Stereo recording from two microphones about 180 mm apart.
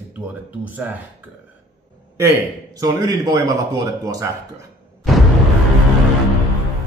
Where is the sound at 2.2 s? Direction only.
15° right (ahead or behind).